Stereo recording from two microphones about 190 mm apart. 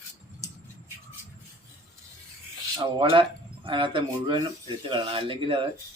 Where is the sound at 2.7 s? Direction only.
25° right (ahead or behind).